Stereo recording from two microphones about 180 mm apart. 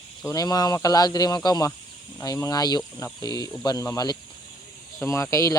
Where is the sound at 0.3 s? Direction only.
20° left (ahead or behind).